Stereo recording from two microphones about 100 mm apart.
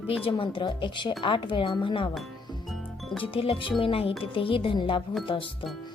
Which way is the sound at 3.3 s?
65° left (ahead or behind).